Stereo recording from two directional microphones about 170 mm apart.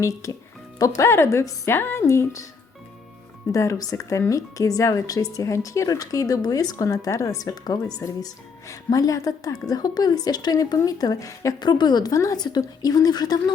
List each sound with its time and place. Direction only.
0.0 s speech: 20° left (ahead or behind)
3.5 s speech: 20° left (ahead or behind)